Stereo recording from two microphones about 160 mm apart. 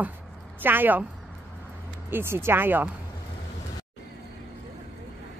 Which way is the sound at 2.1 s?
15° right (ahead or behind).